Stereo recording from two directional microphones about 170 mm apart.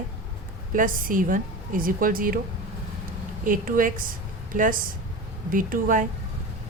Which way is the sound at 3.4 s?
55° right (ahead or behind).